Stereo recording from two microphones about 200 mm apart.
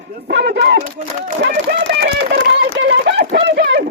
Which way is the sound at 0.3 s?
65° right (ahead or behind).